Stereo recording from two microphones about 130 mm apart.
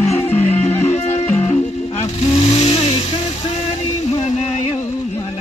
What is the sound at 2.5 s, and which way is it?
Vehicle, 60° left (ahead or behind).